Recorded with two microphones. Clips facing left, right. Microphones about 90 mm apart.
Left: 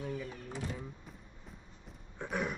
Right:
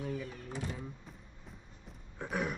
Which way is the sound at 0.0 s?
Centre (ahead or behind).